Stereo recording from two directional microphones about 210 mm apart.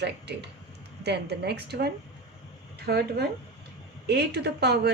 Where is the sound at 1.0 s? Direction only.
55° right (ahead or behind).